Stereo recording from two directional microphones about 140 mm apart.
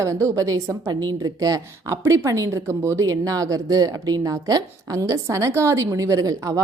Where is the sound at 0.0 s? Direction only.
20° right (ahead or behind).